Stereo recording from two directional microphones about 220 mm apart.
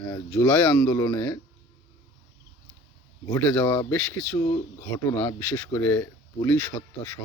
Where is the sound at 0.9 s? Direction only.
15° left (ahead or behind).